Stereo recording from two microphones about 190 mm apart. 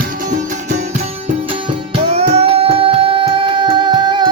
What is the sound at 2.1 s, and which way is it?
Music, 35° right (ahead or behind).